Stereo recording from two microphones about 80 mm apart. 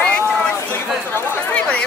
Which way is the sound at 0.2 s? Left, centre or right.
Left.